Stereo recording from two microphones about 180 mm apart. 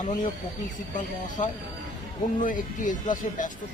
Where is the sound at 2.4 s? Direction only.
45° left (ahead or behind).